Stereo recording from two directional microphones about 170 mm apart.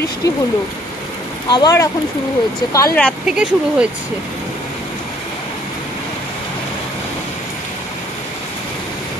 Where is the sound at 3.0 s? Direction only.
5° left (ahead or behind).